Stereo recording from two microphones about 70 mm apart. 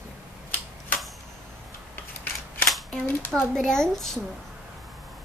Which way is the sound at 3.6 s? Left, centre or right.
Centre.